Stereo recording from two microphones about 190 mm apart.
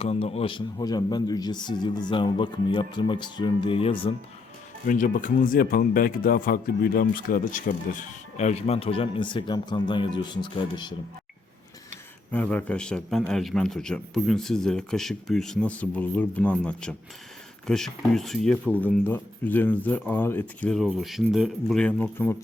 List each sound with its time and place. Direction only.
0.0 s a man's voice: 30° left (ahead or behind)
4.9 s speech: 45° left (ahead or behind); by 10.9 s 25° left (ahead or behind)
12.3 s a man's voice: 10° left (ahead or behind)